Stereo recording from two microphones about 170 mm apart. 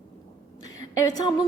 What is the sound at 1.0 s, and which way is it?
Speech, 20° left (ahead or behind).